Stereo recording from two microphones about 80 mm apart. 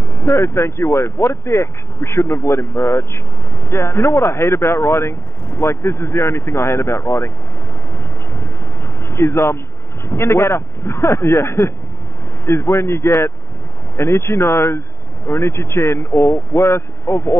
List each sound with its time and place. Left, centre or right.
0.1 s speech: left
9.0 s speech: left